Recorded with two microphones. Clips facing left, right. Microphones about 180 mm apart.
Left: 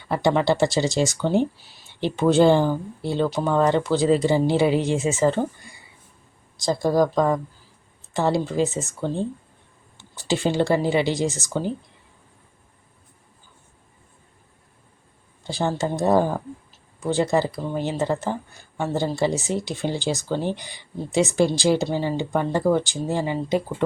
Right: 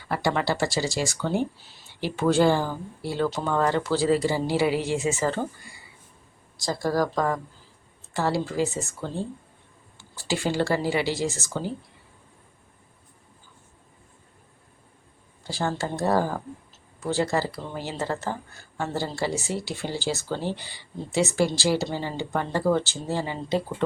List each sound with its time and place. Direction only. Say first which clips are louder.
0.1 s speech: left 5 dB; 20° left (ahead or behind)
6.6 s speech: left 5 dB; 20° left (ahead or behind)
15.4 s speech: left 4 dB; 20° left (ahead or behind)